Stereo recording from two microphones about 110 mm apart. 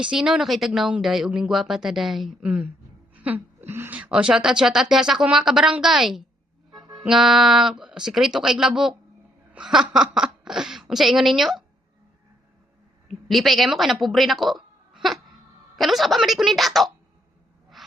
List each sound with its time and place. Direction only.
0.0 s a woman's voice: 5° right (ahead or behind)
6.7 s music: 40° right (ahead or behind)
7.0 s a woman's voice: 5° right (ahead or behind)
13.1 s a woman's voice: centre (ahead or behind)
17.8 s owl: centre (ahead or behind)